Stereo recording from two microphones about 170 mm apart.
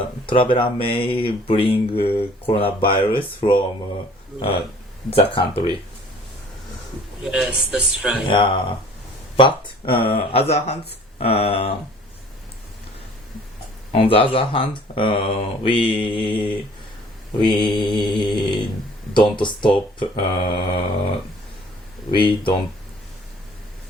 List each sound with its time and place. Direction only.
0.3 s speech: 30° left (ahead or behind)
7.3 s speech: 5° right (ahead or behind)
8.3 s speech: 30° left (ahead or behind)
13.9 s speech: 35° left (ahead or behind)
22.1 s speech: 30° left (ahead or behind)